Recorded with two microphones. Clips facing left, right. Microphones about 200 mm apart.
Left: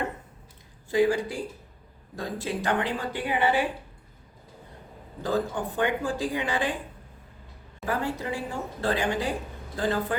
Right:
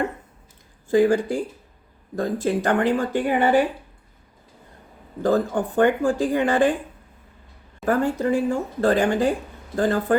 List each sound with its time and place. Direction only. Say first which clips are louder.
0.9 s speech: right 5 dB; 50° right (ahead or behind)
5.2 s speech: right 7 dB; 50° right (ahead or behind)
7.9 s speech: right 9 dB; 45° right (ahead or behind)